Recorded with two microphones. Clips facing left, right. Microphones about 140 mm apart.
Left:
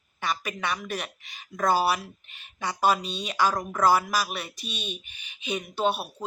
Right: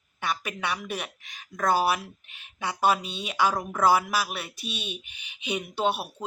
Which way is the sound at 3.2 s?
5° right (ahead or behind).